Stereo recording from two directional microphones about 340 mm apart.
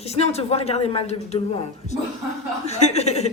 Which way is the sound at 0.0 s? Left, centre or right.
Centre.